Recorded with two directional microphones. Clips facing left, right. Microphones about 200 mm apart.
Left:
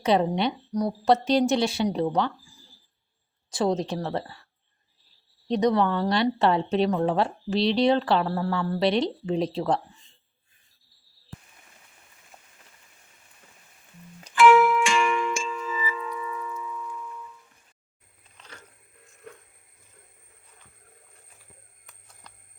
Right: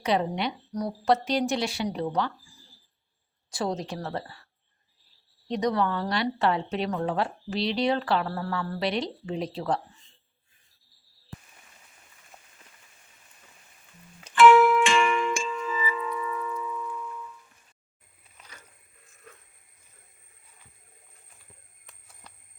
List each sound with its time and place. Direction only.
0.0 s speech: 25° left (ahead or behind)
3.5 s speech: 20° left (ahead or behind)
5.5 s speech: 25° left (ahead or behind)
14.8 s music: centre (ahead or behind)
18.3 s a sound: 10° right (ahead or behind)
21.8 s a sound: 5° right (ahead or behind)